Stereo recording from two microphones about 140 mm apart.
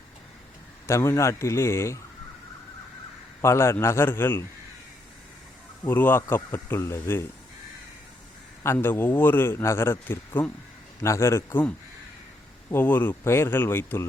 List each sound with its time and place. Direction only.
0.9 s a man's voice: 20° left (ahead or behind)
3.4 s a man's voice: 20° left (ahead or behind)
5.9 s a man's voice: 15° left (ahead or behind)
8.6 s a man's voice: 15° left (ahead or behind)
12.7 s a man's voice: 15° left (ahead or behind)